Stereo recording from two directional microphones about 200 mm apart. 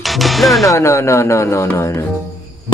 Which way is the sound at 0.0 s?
Centre (ahead or behind).